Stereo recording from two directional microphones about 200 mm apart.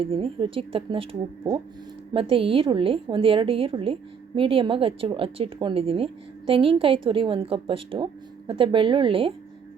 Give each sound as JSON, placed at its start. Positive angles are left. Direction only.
{"t": 0.0, "sound": "a woman's voice", "side_deg": -30}
{"t": 2.1, "sound": "a woman's voice", "side_deg": -25}